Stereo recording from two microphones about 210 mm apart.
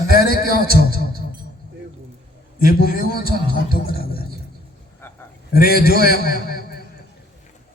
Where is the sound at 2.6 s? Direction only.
45° left (ahead or behind).